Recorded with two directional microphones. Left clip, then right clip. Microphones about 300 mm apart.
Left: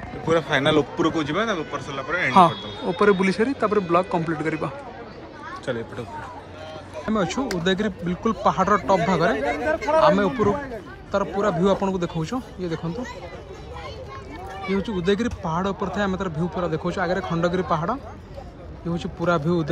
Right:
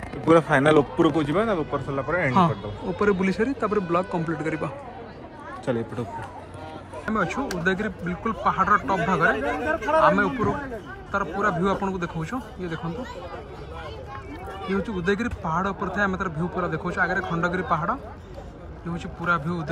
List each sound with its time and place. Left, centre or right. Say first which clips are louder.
0.3 s a man's voice: right 2 dB; right
3.0 s speech: left 4 dB; centre
5.7 s a man's voice: right 1 dB; right
7.1 s speech: left 1 dB; centre
9.4 s speech: left 2 dB; left
9.9 s speech: left 1 dB; centre
14.7 s speech: left 2 dB; centre
18.9 s speech: left 2 dB; centre